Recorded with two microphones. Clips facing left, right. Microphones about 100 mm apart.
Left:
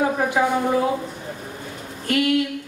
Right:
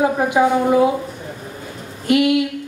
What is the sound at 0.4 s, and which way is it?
Speech, 15° right (ahead or behind).